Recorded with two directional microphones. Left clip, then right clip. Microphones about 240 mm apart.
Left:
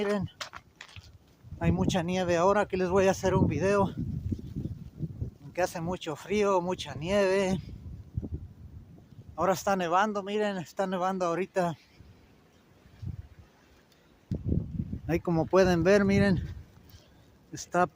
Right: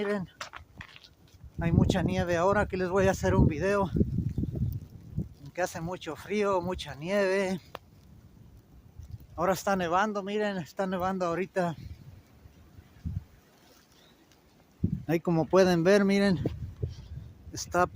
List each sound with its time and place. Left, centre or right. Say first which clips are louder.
0.0 s a sound: left 1 dB; centre
1.5 s speech: even; centre
5.5 s speech: left 2 dB; centre
9.3 s speech: left 1 dB; centre
14.3 s a sound: left 19 dB; centre
15.0 s speech: right 1 dB; centre
17.5 s speech: even; centre